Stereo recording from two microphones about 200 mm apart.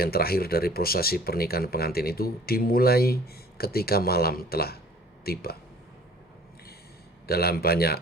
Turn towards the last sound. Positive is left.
turn(degrees=50)  # may be behind; listen again after turning